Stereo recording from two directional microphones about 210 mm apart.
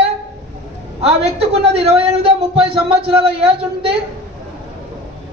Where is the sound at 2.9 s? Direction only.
30° right (ahead or behind).